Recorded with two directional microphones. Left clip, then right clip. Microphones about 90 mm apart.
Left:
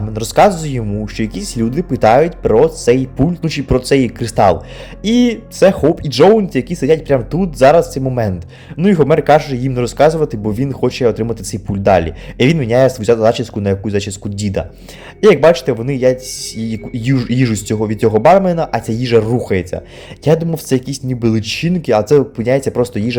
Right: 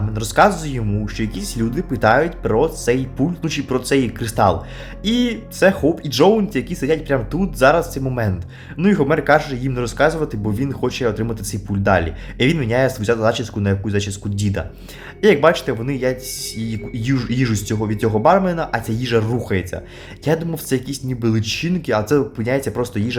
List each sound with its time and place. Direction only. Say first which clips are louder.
0.1 s speech: left 4 dB; 40° left (ahead or behind)